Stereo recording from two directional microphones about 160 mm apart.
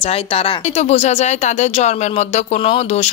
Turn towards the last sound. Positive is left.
turn(degrees=40)  # may be behind; listen again after turning